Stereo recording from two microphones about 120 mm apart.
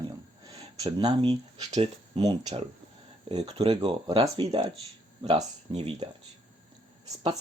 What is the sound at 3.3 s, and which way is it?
Speech, 55° right (ahead or behind).